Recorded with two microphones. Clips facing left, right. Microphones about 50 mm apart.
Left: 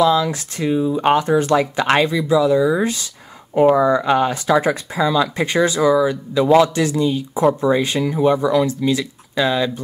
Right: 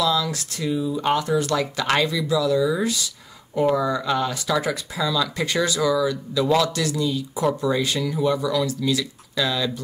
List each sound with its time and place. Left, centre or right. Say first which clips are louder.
0.0 s speech: left 7 dB; left